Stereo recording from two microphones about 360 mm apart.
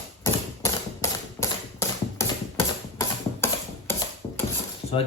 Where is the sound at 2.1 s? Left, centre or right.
Centre.